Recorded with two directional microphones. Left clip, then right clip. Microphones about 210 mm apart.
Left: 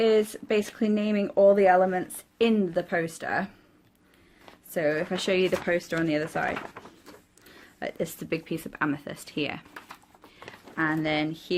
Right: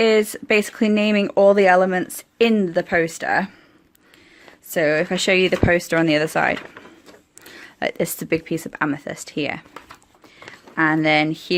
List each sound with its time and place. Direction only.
0.0 s speech: 30° right (ahead or behind)
4.7 s speech: 45° right (ahead or behind)